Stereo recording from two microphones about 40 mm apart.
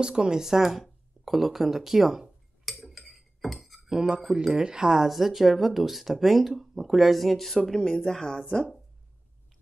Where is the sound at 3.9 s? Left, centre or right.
Centre.